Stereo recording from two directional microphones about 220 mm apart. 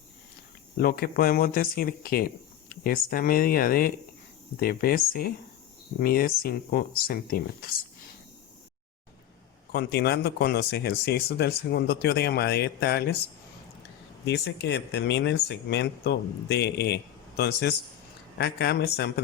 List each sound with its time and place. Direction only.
0.8 s speech: 40° left (ahead or behind)
9.7 s speech: 45° left (ahead or behind)
14.3 s speech: 50° left (ahead or behind)